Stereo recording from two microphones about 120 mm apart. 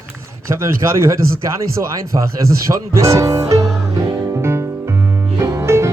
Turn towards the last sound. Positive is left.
turn(degrees=-25)  # may be behind; listen again after turning